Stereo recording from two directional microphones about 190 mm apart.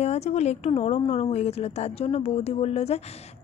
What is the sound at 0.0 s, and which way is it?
Speech, 35° left (ahead or behind).